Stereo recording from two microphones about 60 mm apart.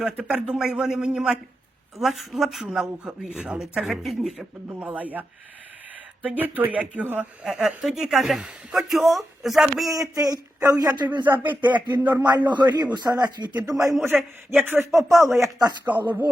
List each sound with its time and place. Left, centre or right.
0.0 s a man's voice: right
3.6 s a man's voice: centre
4.7 s speech: right
6.2 s speech: right
7.4 s a woman's voice: centre
9.9 s speech: right
11.2 s speech: right
12.8 s speech: right
14.1 s a man's voice: centre
14.5 s speech: right
15.2 s chopping: right
15.8 s speech: right